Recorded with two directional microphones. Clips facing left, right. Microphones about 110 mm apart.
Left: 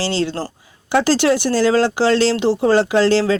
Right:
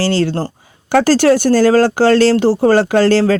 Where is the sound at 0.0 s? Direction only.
50° right (ahead or behind).